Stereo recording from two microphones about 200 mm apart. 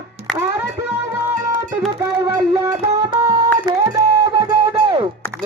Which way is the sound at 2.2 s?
20° right (ahead or behind).